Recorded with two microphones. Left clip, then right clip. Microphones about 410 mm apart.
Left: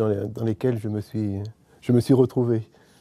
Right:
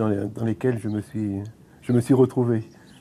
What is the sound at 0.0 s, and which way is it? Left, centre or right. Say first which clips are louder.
Speech: left 1 dB; left.